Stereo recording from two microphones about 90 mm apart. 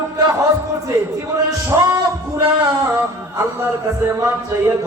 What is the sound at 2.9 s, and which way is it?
Music, 35° right (ahead or behind).